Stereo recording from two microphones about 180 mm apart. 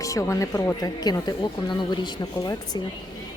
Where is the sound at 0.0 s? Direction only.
20° left (ahead or behind).